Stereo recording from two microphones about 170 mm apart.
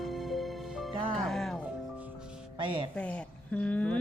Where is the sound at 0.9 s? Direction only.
30° right (ahead or behind).